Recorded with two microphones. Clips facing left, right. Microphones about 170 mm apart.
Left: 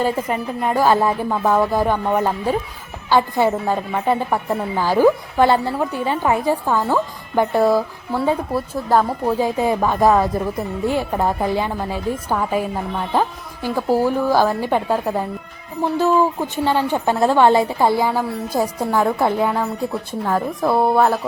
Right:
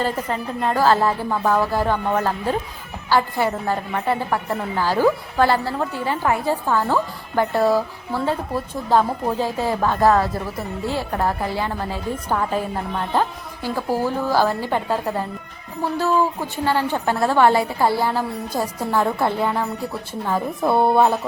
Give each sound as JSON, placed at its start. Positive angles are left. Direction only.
{"t": 0.0, "sound": "a woman's voice", "side_deg": 15}
{"t": 9.4, "sound": "a woman's voice", "side_deg": 15}
{"t": 20.2, "sound": "speech", "side_deg": 0}